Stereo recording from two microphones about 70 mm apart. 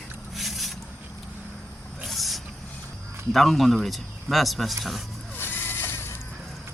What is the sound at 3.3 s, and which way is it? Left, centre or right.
Speech, centre.